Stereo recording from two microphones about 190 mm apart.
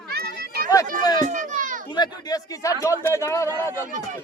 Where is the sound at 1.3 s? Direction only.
40° right (ahead or behind).